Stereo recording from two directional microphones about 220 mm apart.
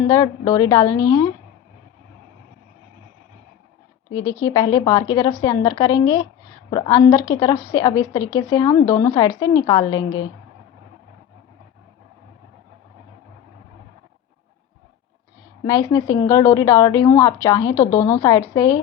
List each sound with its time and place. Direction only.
0.1 s a woman's voice: 15° left (ahead or behind)
4.1 s a woman's voice: 15° left (ahead or behind)
15.6 s a woman's voice: 15° left (ahead or behind)